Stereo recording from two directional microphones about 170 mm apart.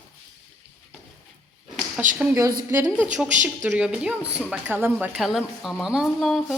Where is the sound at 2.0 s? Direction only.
50° right (ahead or behind).